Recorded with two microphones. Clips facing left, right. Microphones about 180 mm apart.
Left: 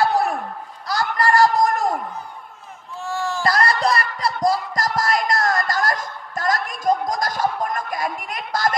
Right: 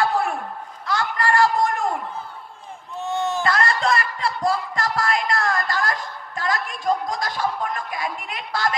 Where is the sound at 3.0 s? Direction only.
20° right (ahead or behind).